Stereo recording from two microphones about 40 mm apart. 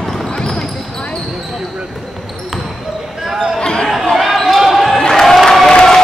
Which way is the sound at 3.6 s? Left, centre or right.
Left.